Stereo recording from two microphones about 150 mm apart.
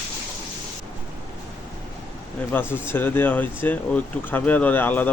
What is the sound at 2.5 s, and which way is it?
Speech, 15° left (ahead or behind).